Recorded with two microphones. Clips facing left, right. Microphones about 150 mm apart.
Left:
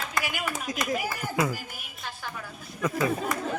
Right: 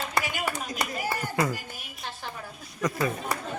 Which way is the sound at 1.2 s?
5° left (ahead or behind).